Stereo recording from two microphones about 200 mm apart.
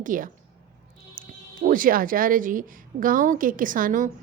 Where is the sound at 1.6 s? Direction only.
45° right (ahead or behind).